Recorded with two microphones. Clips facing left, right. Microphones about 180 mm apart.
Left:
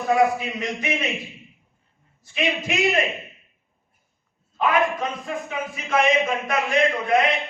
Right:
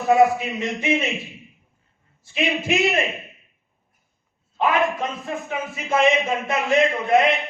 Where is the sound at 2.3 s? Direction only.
25° right (ahead or behind).